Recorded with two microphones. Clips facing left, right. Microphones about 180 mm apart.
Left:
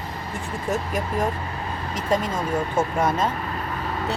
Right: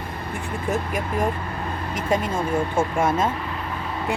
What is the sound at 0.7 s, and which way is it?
Speech, 10° right (ahead or behind).